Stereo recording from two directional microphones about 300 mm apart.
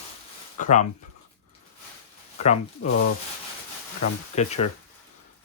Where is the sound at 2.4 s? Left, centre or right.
Left.